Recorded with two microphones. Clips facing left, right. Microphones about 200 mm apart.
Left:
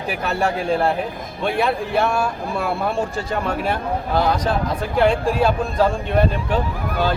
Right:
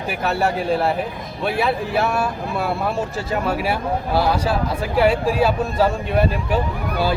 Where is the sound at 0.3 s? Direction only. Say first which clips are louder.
Right 1 dB; 5° right (ahead or behind).